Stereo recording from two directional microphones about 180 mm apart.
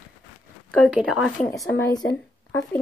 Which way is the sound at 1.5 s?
20° left (ahead or behind).